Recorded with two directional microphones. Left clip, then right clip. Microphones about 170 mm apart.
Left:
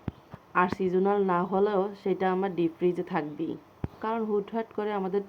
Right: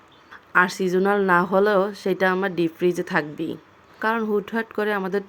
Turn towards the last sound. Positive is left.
turn(degrees=-40)  # may be behind; listen again after turning